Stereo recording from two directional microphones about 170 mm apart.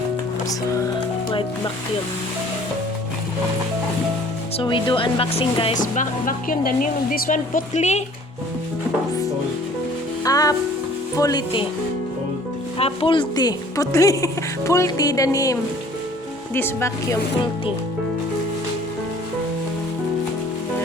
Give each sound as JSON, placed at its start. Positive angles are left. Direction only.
{"t": 1.3, "sound": "speech", "side_deg": 30}
{"t": 4.5, "sound": "speech", "side_deg": 25}
{"t": 5.7, "sound": "speech", "side_deg": 50}
{"t": 10.2, "sound": "music", "side_deg": 20}
{"t": 11.2, "sound": "speech", "side_deg": 25}
{"t": 12.8, "sound": "speech", "side_deg": 30}
{"t": 16.6, "sound": "speech", "side_deg": 15}